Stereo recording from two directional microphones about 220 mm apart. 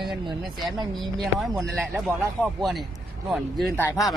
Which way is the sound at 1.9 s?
Centre (ahead or behind).